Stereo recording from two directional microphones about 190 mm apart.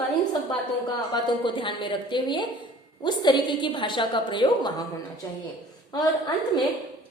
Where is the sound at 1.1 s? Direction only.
25° left (ahead or behind).